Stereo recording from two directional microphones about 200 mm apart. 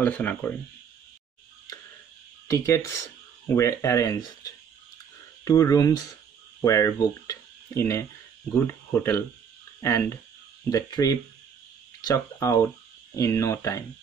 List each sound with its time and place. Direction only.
0.0 s speech: 10° left (ahead or behind)
2.4 s speech: 15° left (ahead or behind)
5.4 s speech: 20° left (ahead or behind)